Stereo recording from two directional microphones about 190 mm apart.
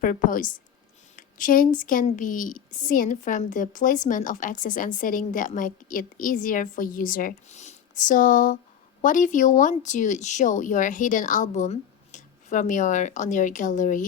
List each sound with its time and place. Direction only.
0.0 s a woman's voice: 45° left (ahead or behind)